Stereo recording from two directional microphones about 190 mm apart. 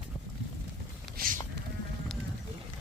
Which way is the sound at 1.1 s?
45° right (ahead or behind).